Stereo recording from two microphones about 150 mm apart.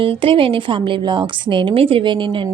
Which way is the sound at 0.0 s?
35° right (ahead or behind).